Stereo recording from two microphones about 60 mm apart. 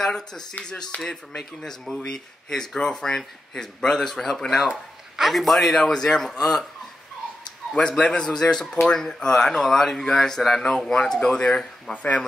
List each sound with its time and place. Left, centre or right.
0.0 s a man's voice: centre
7.7 s speech: centre